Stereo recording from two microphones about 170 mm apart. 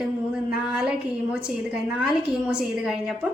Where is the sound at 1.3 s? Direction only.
5° right (ahead or behind).